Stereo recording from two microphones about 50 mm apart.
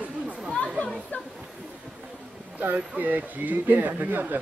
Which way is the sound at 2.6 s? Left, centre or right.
Right.